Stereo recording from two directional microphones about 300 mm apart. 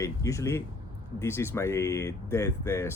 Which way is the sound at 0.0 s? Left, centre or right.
Centre.